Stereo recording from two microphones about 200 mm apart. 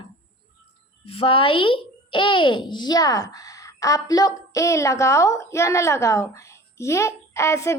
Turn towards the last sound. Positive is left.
turn(degrees=15)  # may be behind; listen again after turning